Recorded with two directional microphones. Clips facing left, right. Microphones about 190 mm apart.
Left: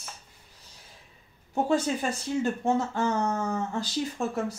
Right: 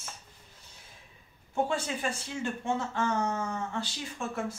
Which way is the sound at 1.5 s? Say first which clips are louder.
Left 5 dB; 40° left (ahead or behind).